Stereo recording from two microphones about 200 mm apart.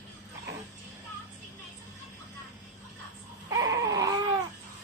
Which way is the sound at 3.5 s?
15° right (ahead or behind).